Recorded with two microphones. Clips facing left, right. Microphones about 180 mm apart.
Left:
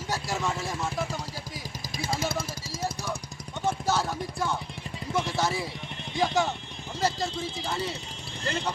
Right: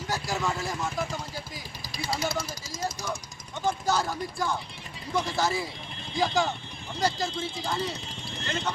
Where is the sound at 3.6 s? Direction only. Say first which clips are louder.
Even; centre (ahead or behind).